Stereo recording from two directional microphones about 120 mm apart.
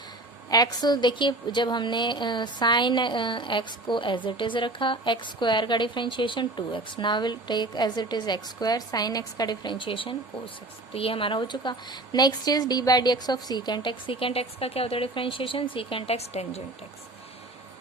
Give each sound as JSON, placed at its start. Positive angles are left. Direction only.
{"t": 0.5, "sound": "a woman's voice", "side_deg": 35}